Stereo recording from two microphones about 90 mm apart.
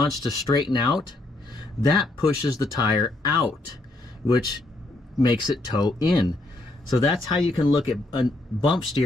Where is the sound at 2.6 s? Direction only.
50° left (ahead or behind).